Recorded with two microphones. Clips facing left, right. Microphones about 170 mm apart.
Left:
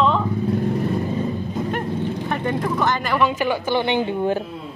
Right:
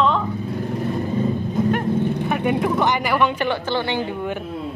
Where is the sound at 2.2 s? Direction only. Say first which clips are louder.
Right 3 dB; 10° right (ahead or behind).